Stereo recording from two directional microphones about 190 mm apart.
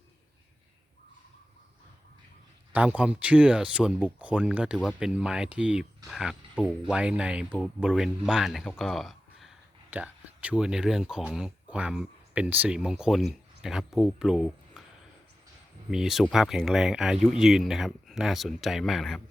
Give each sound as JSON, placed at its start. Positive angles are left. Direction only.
{"t": 2.7, "sound": "speech", "side_deg": -5}
{"t": 15.9, "sound": "speech", "side_deg": 0}